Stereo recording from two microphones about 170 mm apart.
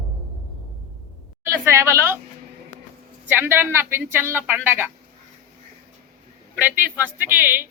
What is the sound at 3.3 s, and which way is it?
A man's voice, 15° right (ahead or behind).